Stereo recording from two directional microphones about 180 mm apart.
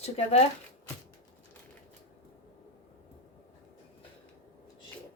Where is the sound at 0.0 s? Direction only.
35° left (ahead or behind).